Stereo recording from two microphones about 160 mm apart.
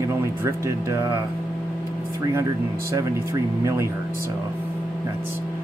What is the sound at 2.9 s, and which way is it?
Speech, 20° right (ahead or behind).